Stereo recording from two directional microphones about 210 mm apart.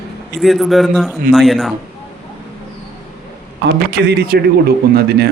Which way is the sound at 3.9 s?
50° right (ahead or behind).